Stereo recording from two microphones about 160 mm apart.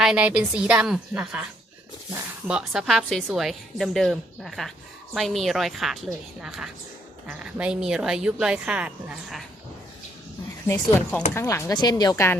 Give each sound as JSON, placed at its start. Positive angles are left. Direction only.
{"t": 0.0, "sound": "a woman's voice", "side_deg": -5}
{"t": 10.7, "sound": "speech", "side_deg": 15}